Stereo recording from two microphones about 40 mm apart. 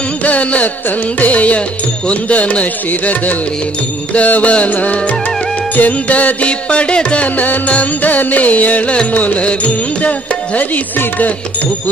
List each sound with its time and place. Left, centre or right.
0.2 s carnatic music: left
1.2 s music: left
4.1 s music: left
7.3 s music: left